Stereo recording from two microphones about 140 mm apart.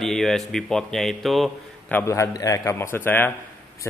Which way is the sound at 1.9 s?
20° left (ahead or behind).